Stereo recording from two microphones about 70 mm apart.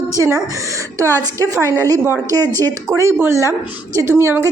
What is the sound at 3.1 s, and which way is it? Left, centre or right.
Speech, right.